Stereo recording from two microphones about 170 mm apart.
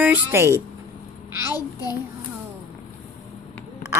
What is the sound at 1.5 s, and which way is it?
Speech, 20° left (ahead or behind).